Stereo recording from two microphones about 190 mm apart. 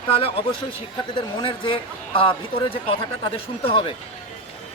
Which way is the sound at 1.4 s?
25° left (ahead or behind).